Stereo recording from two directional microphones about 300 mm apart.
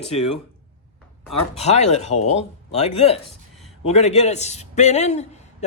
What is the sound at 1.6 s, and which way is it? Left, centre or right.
A man's voice, left.